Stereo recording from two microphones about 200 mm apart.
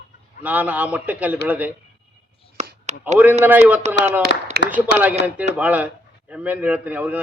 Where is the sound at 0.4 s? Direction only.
10° right (ahead or behind).